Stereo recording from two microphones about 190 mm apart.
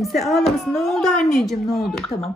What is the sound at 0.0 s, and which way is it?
Speech, centre (ahead or behind).